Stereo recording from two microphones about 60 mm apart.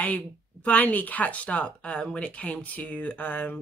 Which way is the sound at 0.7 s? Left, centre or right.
Left.